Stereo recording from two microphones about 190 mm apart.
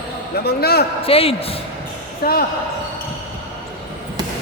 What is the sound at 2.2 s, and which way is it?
Speech, 50° left (ahead or behind).